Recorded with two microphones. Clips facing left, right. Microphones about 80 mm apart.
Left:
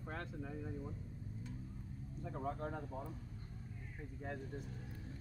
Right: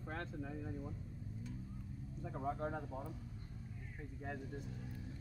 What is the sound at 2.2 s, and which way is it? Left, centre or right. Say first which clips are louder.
Speech: right 1 dB; centre.